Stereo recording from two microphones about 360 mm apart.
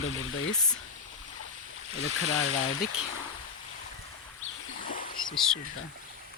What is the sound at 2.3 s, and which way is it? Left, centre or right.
Speech, left.